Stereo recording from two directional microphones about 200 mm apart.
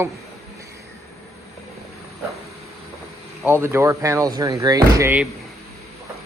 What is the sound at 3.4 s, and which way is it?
Speech, 10° right (ahead or behind).